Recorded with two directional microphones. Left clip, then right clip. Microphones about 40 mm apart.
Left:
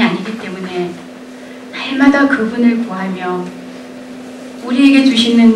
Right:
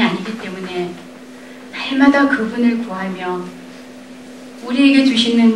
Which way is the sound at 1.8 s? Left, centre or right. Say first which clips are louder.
Left 2 dB; centre.